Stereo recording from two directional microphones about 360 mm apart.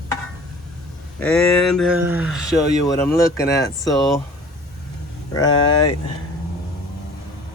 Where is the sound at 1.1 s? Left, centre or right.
Centre.